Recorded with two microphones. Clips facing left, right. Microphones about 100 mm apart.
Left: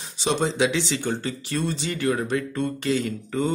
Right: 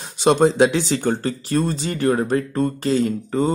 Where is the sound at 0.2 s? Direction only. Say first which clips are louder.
Right 8 dB; 50° right (ahead or behind).